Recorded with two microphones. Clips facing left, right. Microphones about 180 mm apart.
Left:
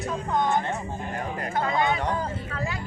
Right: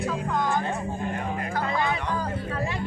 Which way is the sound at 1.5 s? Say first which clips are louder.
Left 3 dB; 25° left (ahead or behind).